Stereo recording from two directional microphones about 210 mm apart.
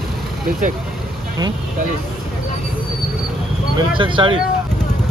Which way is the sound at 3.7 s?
25° right (ahead or behind).